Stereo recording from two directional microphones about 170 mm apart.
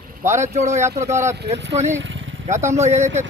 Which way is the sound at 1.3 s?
85° right.